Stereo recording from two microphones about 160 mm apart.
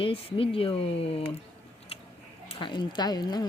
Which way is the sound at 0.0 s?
35° left (ahead or behind).